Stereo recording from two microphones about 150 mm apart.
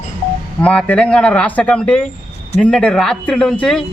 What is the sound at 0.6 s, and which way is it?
Speech, 10° left (ahead or behind).